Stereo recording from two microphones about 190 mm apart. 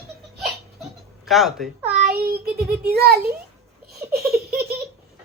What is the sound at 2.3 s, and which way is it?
Speech, 55° right (ahead or behind).